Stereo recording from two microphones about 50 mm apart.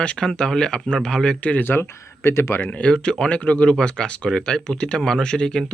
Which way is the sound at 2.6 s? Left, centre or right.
Left.